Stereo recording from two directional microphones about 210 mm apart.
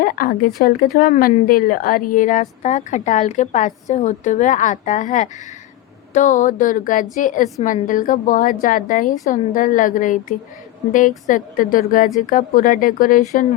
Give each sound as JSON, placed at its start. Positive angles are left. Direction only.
{"t": 0.0, "sound": "a woman's voice", "side_deg": 40}